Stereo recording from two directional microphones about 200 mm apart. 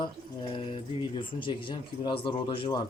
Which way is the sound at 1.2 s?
25° left (ahead or behind).